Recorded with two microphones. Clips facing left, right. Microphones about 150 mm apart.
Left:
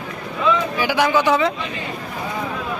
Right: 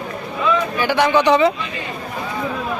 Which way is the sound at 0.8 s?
5° left (ahead or behind).